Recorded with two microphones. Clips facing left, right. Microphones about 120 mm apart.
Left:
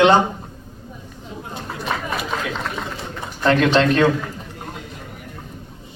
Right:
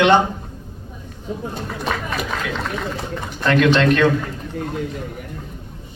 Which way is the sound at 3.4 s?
30° left (ahead or behind).